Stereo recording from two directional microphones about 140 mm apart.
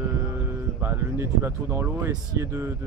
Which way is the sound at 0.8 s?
15° right (ahead or behind).